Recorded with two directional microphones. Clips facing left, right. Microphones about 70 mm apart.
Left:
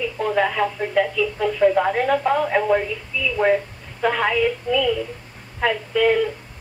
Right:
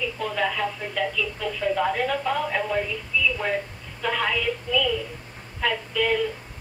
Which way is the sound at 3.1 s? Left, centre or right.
Left.